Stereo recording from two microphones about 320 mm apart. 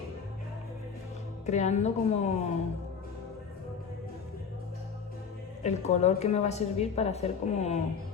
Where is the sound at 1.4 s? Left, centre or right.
Left.